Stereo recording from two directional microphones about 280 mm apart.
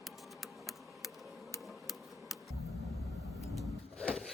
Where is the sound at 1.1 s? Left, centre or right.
Centre.